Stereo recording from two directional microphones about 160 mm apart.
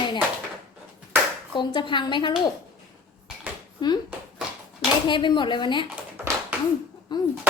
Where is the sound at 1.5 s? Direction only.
30° left (ahead or behind).